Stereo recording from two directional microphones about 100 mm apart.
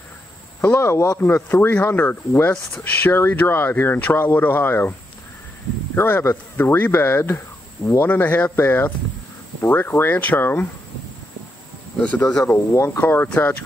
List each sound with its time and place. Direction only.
0.6 s speech: 20° left (ahead or behind)
5.9 s speech: 20° left (ahead or behind)
8.1 s speech: 15° left (ahead or behind)
12.0 s speech: 15° left (ahead or behind)
12.4 s speech: 25° left (ahead or behind)